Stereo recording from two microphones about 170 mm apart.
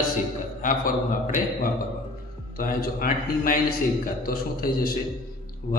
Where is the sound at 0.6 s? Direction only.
55° left (ahead or behind).